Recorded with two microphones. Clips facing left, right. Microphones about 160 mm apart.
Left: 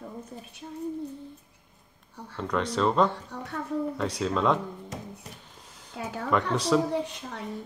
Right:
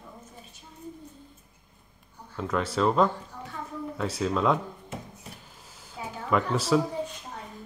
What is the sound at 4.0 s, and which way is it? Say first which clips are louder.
Speech: right 4 dB; centre (ahead or behind).